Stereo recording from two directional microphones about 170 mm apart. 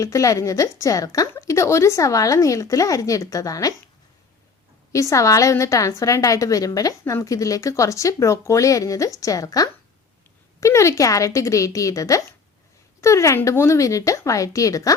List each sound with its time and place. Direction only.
0.0 s a woman's voice: 20° left (ahead or behind)
4.9 s a woman's voice: 20° left (ahead or behind)